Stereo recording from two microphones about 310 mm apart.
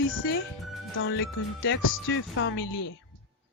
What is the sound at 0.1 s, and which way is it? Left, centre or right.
Speech, left.